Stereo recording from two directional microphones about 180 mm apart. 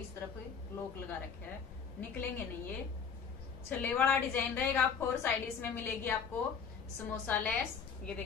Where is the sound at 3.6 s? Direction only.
10° left (ahead or behind).